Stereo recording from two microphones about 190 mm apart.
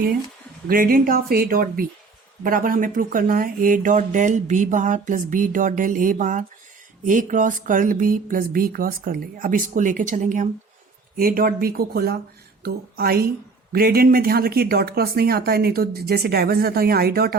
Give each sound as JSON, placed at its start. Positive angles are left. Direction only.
{"t": 0.7, "sound": "speech", "side_deg": -50}